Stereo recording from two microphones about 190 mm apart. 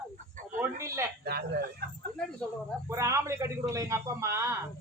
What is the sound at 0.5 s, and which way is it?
Speech, 15° right (ahead or behind).